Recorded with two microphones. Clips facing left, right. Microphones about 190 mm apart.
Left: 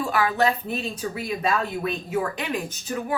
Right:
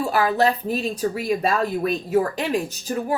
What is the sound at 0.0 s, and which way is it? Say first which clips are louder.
A woman's voice: right 3 dB; 35° right (ahead or behind).